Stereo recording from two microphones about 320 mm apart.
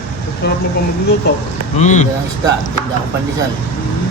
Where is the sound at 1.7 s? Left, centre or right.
Left.